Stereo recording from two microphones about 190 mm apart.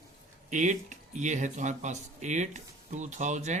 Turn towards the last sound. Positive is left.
turn(degrees=-40)  # may be behind; listen again after turning